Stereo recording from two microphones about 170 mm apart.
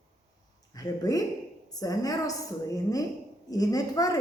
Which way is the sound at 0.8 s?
20° left (ahead or behind).